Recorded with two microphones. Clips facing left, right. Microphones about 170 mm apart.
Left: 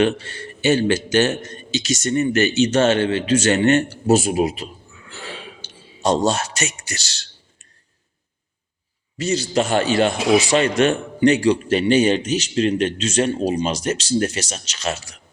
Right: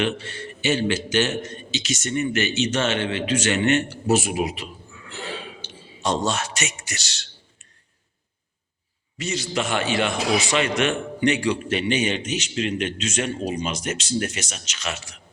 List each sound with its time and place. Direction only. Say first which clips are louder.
0.0 s a man's voice: left 6 dB; 45° left (ahead or behind)
4.0 s a man's voice: left 5 dB; 30° left (ahead or behind)
6.1 s a man's voice: left 5 dB; 35° left (ahead or behind)
9.1 s a man's voice: left 7 dB; 35° left (ahead or behind)